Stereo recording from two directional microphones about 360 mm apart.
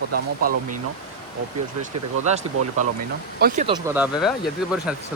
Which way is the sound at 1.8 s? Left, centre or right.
Centre.